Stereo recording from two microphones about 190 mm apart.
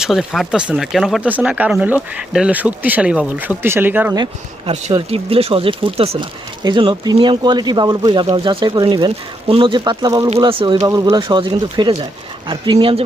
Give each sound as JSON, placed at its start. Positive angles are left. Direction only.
{"t": 0.0, "sound": "speech", "side_deg": 0}
{"t": 4.2, "sound": "speech", "side_deg": -25}
{"t": 10.8, "sound": "speech", "side_deg": -20}